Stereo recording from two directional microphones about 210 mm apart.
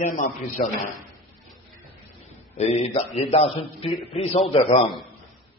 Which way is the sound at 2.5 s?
30° left (ahead or behind).